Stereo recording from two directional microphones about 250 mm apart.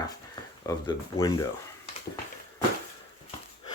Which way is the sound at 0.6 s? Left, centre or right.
Centre.